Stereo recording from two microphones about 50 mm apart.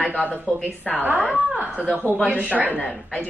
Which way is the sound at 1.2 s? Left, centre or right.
Right.